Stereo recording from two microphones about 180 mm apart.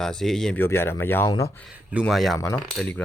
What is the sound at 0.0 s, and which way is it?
Speech, centre (ahead or behind).